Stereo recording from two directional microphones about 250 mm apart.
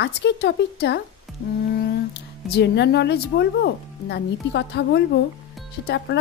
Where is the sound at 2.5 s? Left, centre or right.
Left.